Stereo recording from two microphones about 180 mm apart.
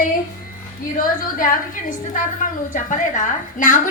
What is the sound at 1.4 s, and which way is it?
A woman's voice, 45° left (ahead or behind).